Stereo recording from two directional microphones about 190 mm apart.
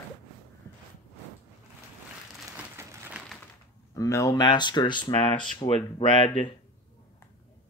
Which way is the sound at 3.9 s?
15° left (ahead or behind).